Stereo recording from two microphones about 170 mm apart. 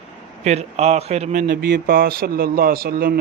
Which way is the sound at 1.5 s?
65° right (ahead or behind).